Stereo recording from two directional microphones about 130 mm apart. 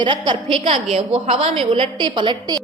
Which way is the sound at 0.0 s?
45° right (ahead or behind).